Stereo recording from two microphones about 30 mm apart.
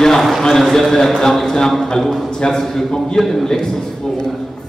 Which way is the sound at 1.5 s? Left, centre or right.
Centre.